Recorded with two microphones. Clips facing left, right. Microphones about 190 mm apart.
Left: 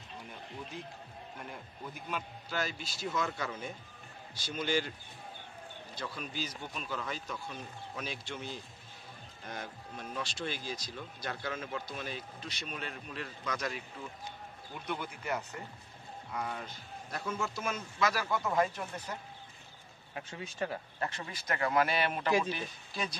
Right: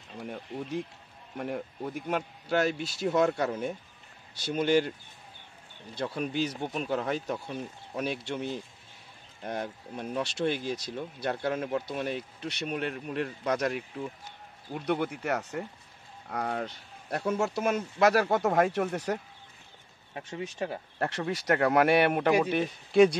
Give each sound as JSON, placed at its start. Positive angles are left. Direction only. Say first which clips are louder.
{"t": 0.2, "sound": "speech", "louder": "right 10 dB", "side_deg": -75}
{"t": 4.5, "sound": "speech", "louder": "right 8 dB", "side_deg": -60}
{"t": 6.1, "sound": "speech", "louder": "right 10 dB", "side_deg": -65}
{"t": 9.4, "sound": "speech", "louder": "right 9 dB", "side_deg": -50}
{"t": 14.7, "sound": "speech", "louder": "right 10 dB", "side_deg": -75}
{"t": 16.3, "sound": "speech", "louder": "right 7 dB", "side_deg": -65}
{"t": 20.5, "sound": "speech", "louder": "even", "side_deg": -20}
{"t": 21.0, "sound": "speech", "louder": "right 12 dB", "side_deg": -75}